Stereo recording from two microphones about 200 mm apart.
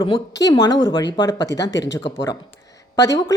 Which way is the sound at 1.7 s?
65° left (ahead or behind).